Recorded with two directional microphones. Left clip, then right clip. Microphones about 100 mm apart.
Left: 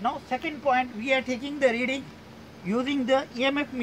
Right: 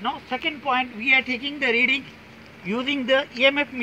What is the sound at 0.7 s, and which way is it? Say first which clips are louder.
A woman's voice: right 3 dB; 30° left (ahead or behind).